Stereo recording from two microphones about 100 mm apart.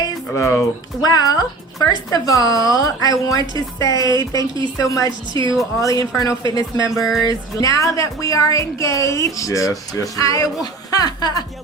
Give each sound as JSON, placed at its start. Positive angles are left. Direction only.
{"t": 0.3, "sound": "speech", "side_deg": 30}
{"t": 1.0, "sound": "speech", "side_deg": 40}
{"t": 5.3, "sound": "a woman's voice", "side_deg": -50}
{"t": 5.8, "sound": "speech", "side_deg": 35}